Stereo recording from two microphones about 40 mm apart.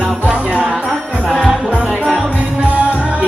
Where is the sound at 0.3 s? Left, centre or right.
Right.